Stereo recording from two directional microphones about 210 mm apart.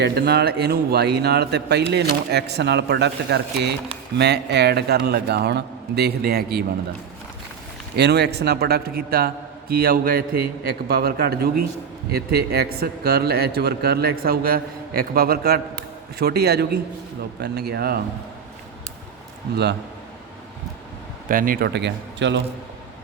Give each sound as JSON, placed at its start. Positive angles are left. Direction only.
{"t": 0.0, "sound": "speech", "side_deg": -50}
{"t": 7.9, "sound": "speech", "side_deg": -50}
{"t": 21.2, "sound": "speech", "side_deg": -40}